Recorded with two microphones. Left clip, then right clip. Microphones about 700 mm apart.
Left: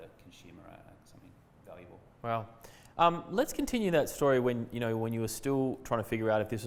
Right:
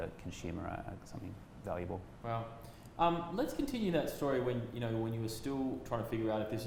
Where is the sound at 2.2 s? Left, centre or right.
Left.